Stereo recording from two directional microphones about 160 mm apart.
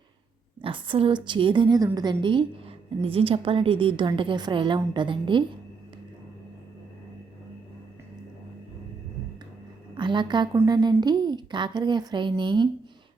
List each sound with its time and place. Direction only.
0.6 s a woman's voice: 35° right (ahead or behind)
9.9 s a woman's voice: 30° right (ahead or behind)